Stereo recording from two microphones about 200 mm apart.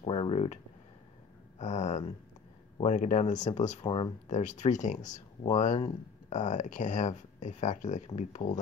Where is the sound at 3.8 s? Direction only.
25° left (ahead or behind).